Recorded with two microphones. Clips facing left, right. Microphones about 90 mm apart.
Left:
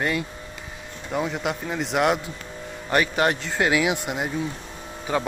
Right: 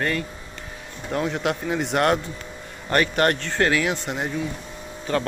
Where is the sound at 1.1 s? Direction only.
5° left (ahead or behind).